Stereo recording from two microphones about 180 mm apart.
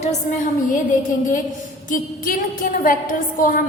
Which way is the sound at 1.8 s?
50° left (ahead or behind).